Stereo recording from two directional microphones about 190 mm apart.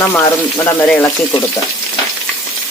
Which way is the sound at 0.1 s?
10° left (ahead or behind).